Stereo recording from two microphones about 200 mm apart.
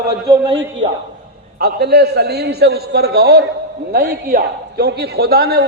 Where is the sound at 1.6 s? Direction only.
55° right (ahead or behind).